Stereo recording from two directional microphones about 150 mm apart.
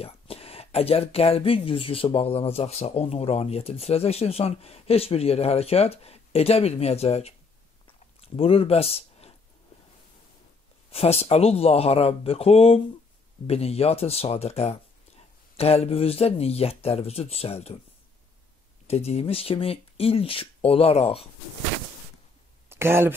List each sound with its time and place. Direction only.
0.0 s speech: 40° left (ahead or behind)
7.8 s chewing: 40° left (ahead or behind)
10.9 s speech: 45° left (ahead or behind)
18.9 s speech: 45° left (ahead or behind)
22.7 s a sound: 15° right (ahead or behind)